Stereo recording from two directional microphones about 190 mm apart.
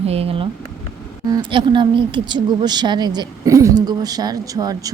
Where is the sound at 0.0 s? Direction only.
30° right (ahead or behind).